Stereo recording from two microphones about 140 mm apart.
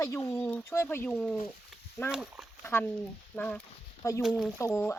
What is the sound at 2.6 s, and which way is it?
Speech, 15° left (ahead or behind).